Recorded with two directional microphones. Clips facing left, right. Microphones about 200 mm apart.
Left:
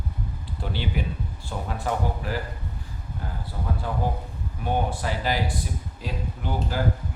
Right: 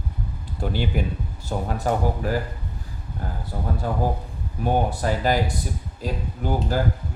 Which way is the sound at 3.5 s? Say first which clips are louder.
Right 4 dB; 45° right (ahead or behind).